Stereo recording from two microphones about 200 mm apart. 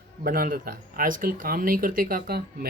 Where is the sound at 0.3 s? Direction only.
45° right (ahead or behind).